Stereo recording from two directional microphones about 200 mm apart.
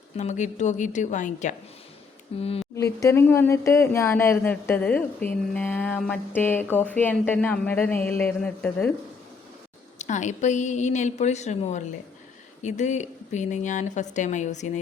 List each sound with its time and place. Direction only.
0.2 s a woman's voice: 35° left (ahead or behind)
2.7 s speech: 15° left (ahead or behind)
10.0 s a woman's voice: 35° left (ahead or behind)